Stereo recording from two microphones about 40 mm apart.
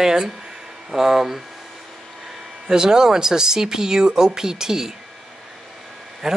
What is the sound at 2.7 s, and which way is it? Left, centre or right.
Speech, centre.